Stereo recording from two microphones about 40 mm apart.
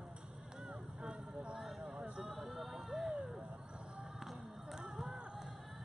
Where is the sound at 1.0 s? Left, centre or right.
Centre.